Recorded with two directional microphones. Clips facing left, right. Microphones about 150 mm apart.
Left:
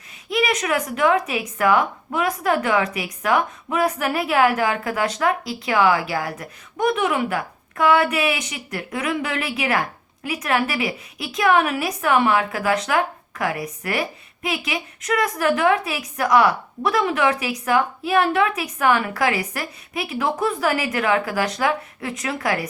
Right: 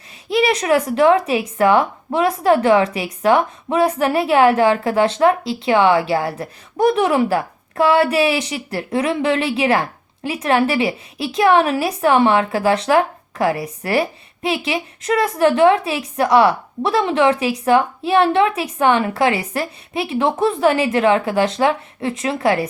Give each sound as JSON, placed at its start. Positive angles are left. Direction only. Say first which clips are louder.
{"t": 0.3, "sound": "a woman's voice", "louder": "right 6 dB", "side_deg": -30}